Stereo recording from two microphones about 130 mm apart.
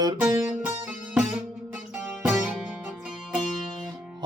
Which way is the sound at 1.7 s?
10° right (ahead or behind).